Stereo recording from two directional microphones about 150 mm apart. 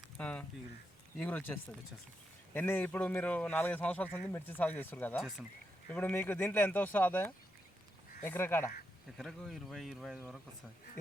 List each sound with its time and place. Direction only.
0.2 s speech: 10° left (ahead or behind)
9.1 s speech: centre (ahead or behind)